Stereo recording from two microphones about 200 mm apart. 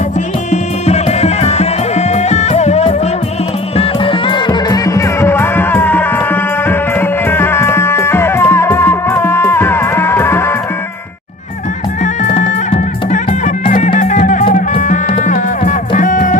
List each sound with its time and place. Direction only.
0.5 s music: 35° left (ahead or behind); by 10.5 s 10° left (ahead or behind)
12.0 s music: 40° left (ahead or behind)